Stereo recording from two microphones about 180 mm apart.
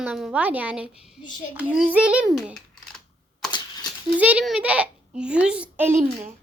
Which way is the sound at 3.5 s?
25° left (ahead or behind).